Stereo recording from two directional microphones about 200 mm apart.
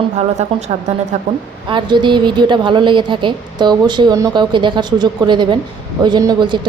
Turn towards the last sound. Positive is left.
turn(degrees=-25)  # may be behind; listen again after turning